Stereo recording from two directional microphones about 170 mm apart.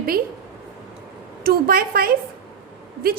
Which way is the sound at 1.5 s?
65° right (ahead or behind).